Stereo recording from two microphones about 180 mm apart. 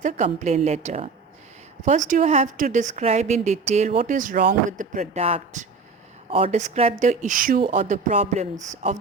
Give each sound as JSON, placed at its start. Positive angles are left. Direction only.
{"t": 0.0, "sound": "speech", "side_deg": -45}